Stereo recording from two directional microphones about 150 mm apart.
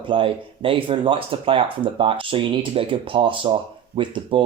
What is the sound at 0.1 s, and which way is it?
Speech, 35° right (ahead or behind).